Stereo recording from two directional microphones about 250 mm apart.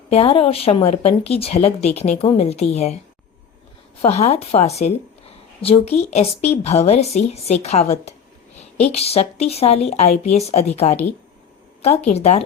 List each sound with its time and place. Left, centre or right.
0.1 s speech: left
4.0 s speech: left